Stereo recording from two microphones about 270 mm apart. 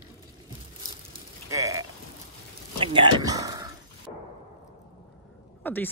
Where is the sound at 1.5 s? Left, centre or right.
Centre.